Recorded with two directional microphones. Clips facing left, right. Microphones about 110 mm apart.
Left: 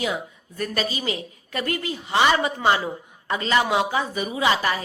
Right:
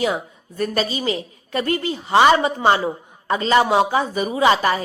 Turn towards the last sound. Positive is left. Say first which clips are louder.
# right 5 dB
turn(degrees=-35)  # may be behind; listen again after turning